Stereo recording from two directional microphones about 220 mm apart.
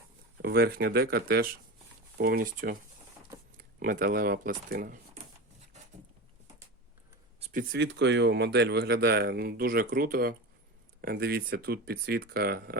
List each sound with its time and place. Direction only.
0.4 s speech: 45° right (ahead or behind)
3.8 s speech: 40° right (ahead or behind)
7.3 s a sound: 30° right (ahead or behind)
7.7 s speech: 50° right (ahead or behind)